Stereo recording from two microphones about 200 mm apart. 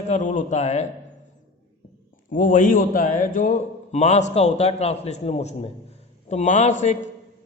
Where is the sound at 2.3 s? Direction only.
40° left (ahead or behind).